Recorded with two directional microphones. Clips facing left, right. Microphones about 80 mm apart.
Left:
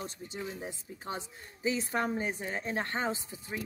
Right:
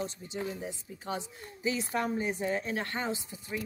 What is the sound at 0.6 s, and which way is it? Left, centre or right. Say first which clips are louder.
A woman's voice: right 1 dB; left.